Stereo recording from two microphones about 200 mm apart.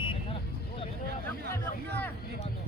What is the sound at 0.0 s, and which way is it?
Vehicle, 25° left (ahead or behind).